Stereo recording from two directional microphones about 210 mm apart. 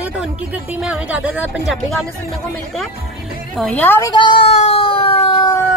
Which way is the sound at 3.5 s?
5° left (ahead or behind).